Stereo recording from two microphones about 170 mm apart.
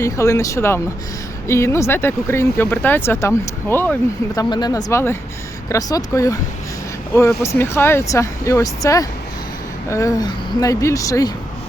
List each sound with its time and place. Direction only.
0.0 s speech: 15° left (ahead or behind)
4.4 s speech: 25° left (ahead or behind)